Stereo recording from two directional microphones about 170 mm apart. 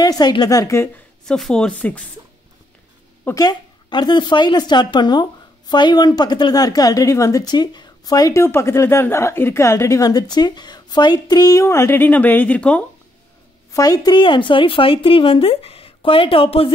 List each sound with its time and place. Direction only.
0.0 s a woman's voice: 25° left (ahead or behind)
1.2 s speech: 5° left (ahead or behind)
3.3 s a woman's voice: 20° left (ahead or behind); by 12.8 s 5° left (ahead or behind)
13.7 s speech: 20° left (ahead or behind)